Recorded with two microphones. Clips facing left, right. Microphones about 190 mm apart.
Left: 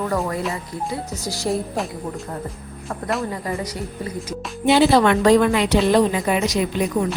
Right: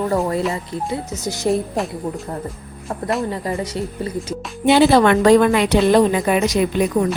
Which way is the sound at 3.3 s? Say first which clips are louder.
Right 3 dB; 25° right (ahead or behind).